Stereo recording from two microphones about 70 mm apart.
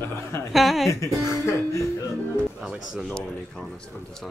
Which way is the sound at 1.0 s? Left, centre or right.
Left.